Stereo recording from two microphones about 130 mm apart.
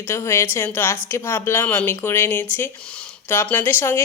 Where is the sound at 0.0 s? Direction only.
20° left (ahead or behind).